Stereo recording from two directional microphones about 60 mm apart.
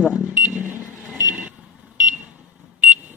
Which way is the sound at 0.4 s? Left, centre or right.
Right.